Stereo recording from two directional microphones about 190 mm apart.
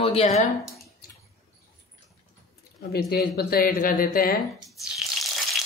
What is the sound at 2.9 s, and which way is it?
Speech, 55° left (ahead or behind).